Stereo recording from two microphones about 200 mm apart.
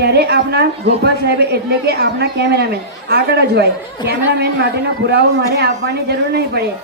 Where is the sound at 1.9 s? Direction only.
55° right (ahead or behind).